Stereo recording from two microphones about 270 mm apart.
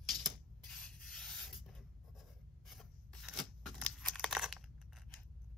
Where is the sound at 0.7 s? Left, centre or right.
Centre.